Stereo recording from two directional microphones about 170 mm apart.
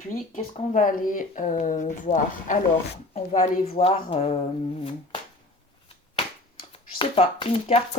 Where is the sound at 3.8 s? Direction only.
35° left (ahead or behind).